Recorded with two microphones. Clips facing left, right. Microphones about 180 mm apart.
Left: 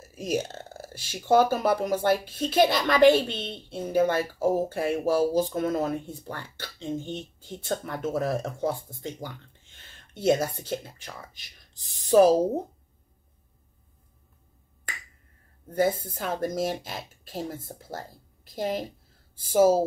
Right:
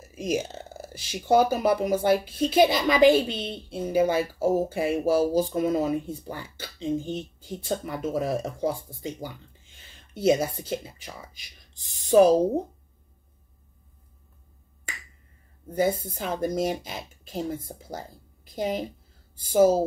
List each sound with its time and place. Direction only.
0.1 s speech: centre (ahead or behind)
16.2 s speech: centre (ahead or behind)